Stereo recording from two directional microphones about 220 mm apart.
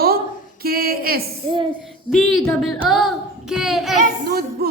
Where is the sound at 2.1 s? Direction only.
Centre (ahead or behind).